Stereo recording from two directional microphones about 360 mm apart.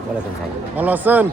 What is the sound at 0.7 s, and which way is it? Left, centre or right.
Speech, centre.